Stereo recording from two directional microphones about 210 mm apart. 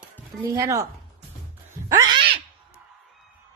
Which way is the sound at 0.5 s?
15° right (ahead or behind).